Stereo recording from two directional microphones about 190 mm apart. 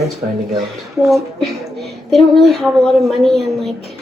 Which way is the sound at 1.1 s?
Centre (ahead or behind).